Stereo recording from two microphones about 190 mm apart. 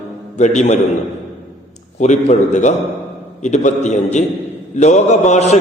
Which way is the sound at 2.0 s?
40° left (ahead or behind).